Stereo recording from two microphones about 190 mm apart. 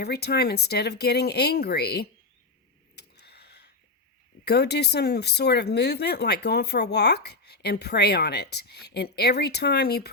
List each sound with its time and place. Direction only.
0.0 s speech: 60° left (ahead or behind)
2.9 s a sound: 60° left (ahead or behind)
4.4 s speech: 60° left (ahead or behind)